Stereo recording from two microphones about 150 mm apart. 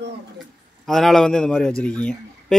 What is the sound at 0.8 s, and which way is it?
A man's voice, centre (ahead or behind).